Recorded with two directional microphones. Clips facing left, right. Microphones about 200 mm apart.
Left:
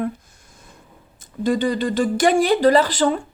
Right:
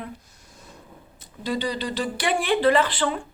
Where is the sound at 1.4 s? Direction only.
50° left (ahead or behind).